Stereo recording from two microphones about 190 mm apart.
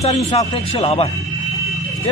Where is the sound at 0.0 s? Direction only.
35° left (ahead or behind).